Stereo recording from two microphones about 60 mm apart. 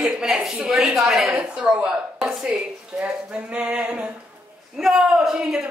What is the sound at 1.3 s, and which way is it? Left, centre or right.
Speech, right.